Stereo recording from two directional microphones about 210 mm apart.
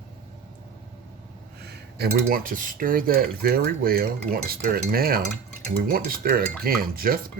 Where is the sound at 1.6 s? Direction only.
45° right (ahead or behind).